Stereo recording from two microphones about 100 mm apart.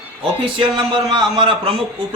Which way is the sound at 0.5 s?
55° right (ahead or behind).